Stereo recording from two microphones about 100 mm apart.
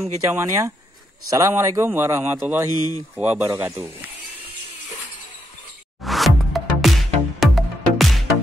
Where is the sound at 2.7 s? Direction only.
40° left (ahead or behind).